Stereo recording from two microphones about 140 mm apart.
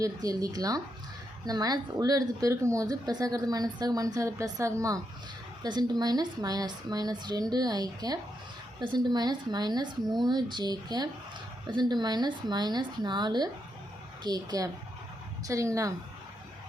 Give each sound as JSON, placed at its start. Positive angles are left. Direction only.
{"t": 0.0, "sound": "a woman's voice", "side_deg": -25}